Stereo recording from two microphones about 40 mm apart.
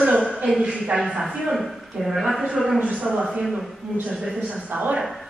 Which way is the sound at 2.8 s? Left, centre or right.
Right.